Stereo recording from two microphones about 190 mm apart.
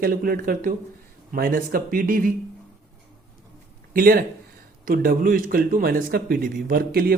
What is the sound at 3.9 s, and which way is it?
Speech, 50° right (ahead or behind).